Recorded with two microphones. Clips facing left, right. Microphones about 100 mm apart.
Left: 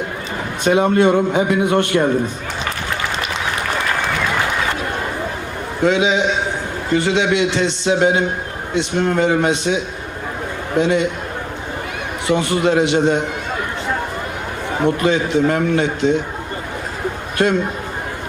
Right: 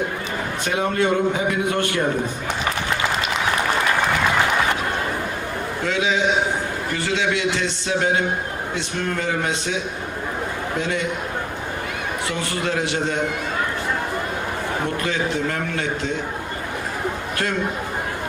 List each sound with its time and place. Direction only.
0.6 s a man's voice: 20° left (ahead or behind)
5.8 s a man's voice: 20° left (ahead or behind)
12.3 s a man's voice: 20° left (ahead or behind)
14.8 s a man's voice: 20° left (ahead or behind)
17.4 s a man's voice: 20° left (ahead or behind)